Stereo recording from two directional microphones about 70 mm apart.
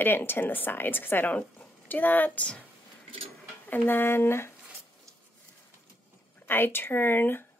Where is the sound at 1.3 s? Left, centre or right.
Centre.